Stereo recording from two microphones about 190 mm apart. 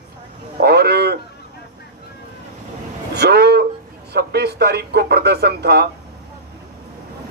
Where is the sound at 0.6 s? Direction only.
55° right (ahead or behind).